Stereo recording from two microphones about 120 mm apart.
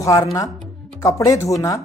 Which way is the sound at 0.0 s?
25° left (ahead or behind).